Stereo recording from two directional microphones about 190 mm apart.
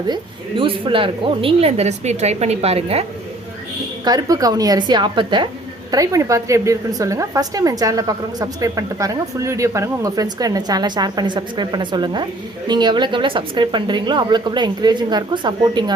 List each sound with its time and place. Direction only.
0.1 s a woman's voice: 25° right (ahead or behind)
4.0 s a woman's voice: 20° right (ahead or behind)